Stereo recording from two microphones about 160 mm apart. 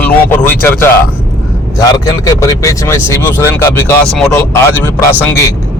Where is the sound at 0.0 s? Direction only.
10° left (ahead or behind).